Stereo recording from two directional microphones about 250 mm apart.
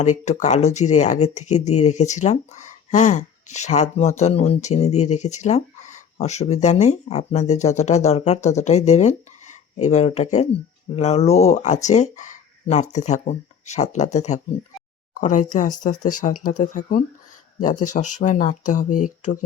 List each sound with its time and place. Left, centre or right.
0.3 s speech: left